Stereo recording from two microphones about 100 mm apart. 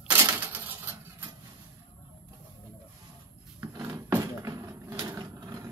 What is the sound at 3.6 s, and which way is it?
Wood, 35° right (ahead or behind).